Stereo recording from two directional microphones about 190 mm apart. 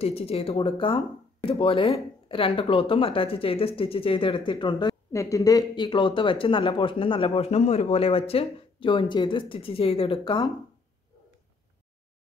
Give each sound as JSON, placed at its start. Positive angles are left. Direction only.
{"t": 0.0, "sound": "speech", "side_deg": 30}